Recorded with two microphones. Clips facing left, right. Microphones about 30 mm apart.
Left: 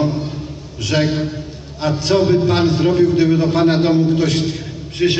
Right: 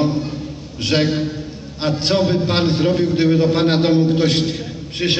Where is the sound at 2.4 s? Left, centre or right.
Right.